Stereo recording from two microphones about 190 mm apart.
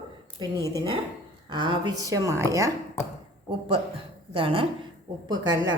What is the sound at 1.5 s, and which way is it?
A woman's voice, 25° right (ahead or behind).